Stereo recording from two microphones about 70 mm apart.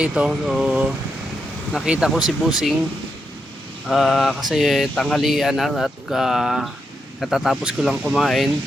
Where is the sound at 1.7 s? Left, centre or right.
Centre.